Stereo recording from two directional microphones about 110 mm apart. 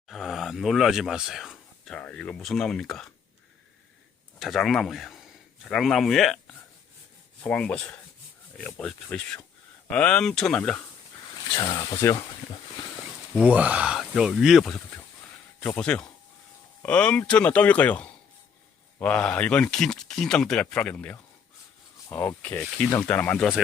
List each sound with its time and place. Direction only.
0.1 s a sound: centre (ahead or behind)
2.0 s speech: 10° left (ahead or behind)
4.4 s speech: centre (ahead or behind)
7.4 s speech: 10° left (ahead or behind)
11.5 s speech: 45° left (ahead or behind)
11.8 s speech: 30° left (ahead or behind)
13.3 s speech: 10° right (ahead or behind)
15.6 s speech: 10° left (ahead or behind)